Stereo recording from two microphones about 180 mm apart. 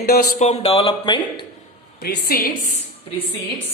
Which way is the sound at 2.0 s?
55° left (ahead or behind).